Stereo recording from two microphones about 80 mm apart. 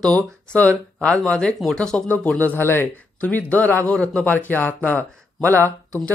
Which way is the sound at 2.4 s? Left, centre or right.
Left.